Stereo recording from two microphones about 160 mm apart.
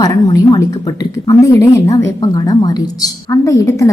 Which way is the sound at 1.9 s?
20° left (ahead or behind).